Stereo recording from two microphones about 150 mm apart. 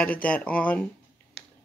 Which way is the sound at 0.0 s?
10° left (ahead or behind).